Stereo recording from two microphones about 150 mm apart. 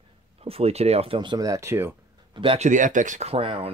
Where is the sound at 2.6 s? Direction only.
55° right (ahead or behind); by 3.7 s 40° right (ahead or behind).